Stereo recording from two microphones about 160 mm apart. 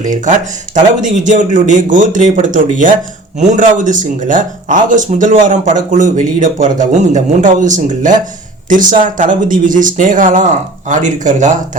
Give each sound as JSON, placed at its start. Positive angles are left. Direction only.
{"t": 0.0, "sound": "speech", "side_deg": -50}